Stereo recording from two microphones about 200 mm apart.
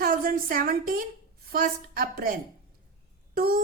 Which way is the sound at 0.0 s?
45° right (ahead or behind).